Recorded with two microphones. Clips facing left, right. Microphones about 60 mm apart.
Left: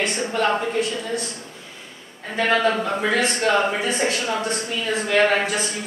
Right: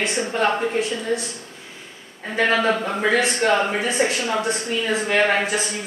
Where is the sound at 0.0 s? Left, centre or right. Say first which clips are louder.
Right 1 dB; centre.